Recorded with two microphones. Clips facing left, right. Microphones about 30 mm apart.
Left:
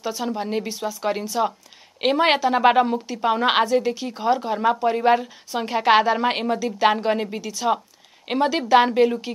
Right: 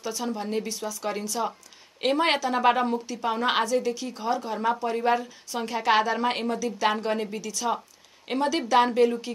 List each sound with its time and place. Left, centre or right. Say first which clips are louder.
0.0 s a woman's voice: left 4 dB; centre